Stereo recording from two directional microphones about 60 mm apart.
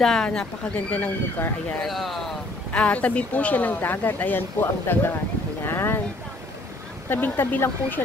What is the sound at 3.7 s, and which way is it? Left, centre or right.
Speech, left.